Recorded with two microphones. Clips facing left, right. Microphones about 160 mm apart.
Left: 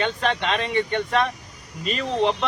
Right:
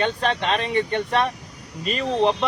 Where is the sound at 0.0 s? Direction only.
35° right (ahead or behind).